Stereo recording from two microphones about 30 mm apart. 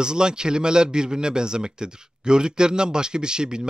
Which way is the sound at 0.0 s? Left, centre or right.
Right.